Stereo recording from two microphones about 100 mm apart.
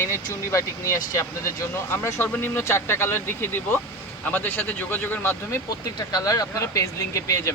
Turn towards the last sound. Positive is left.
turn(degrees=30)  # may be behind; listen again after turning